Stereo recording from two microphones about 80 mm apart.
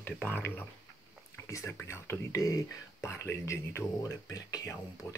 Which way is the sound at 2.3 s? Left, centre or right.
Left.